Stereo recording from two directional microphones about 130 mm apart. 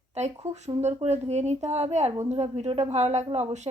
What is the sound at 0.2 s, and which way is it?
Speech, 60° right (ahead or behind).